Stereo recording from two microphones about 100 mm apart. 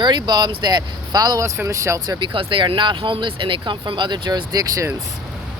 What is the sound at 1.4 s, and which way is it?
Speech, 30° right (ahead or behind).